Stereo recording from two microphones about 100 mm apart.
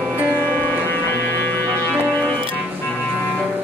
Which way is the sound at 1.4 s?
20° left (ahead or behind).